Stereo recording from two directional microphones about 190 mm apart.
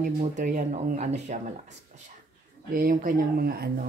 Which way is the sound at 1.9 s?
40° right (ahead or behind).